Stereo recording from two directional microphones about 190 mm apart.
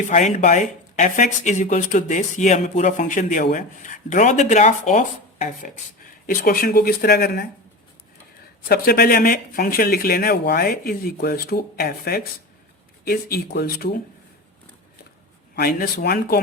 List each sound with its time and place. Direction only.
0.0 s speech: 40° left (ahead or behind)
6.2 s speech: 50° left (ahead or behind)
8.6 s speech: 50° left (ahead or behind)
15.5 s speech: 50° left (ahead or behind)